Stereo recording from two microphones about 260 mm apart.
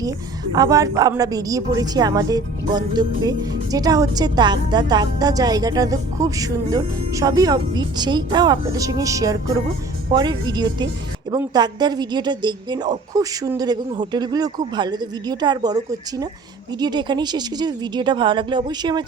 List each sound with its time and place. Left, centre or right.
0.5 s a woman's voice: centre